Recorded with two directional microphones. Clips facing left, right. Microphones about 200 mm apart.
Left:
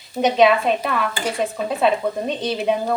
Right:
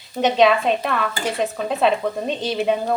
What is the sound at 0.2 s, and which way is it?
Speech, centre (ahead or behind).